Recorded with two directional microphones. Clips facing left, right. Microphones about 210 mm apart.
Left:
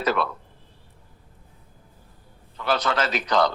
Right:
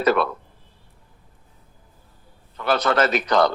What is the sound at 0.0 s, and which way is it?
Speech, 55° right (ahead or behind).